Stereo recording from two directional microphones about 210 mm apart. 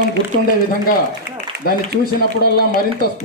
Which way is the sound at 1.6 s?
45° left (ahead or behind).